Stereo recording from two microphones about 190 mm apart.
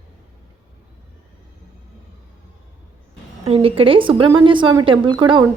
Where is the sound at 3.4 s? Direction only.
30° right (ahead or behind).